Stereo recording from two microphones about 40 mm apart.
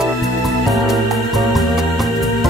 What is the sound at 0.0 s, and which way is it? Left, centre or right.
Music, centre.